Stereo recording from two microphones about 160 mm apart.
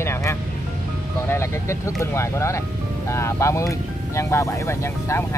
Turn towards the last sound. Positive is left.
turn(degrees=15)  # may be behind; listen again after turning